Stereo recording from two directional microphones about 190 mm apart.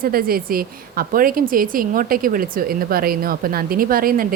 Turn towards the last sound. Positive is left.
turn(degrees=-50)  # may be behind; listen again after turning